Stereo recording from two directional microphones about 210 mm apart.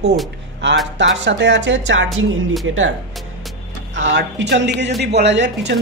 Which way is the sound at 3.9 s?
60° right (ahead or behind).